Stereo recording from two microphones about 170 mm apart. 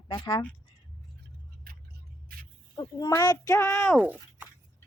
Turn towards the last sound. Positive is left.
turn(degrees=-10)  # may be behind; listen again after turning